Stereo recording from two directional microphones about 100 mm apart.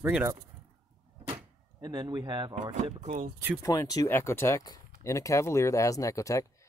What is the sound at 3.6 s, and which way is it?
Speech, 35° left (ahead or behind).